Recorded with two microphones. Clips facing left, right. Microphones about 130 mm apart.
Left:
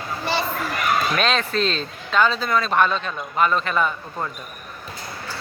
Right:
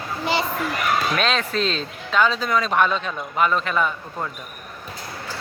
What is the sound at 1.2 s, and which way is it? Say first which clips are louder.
Speech: left 1 dB; 5° right (ahead or behind).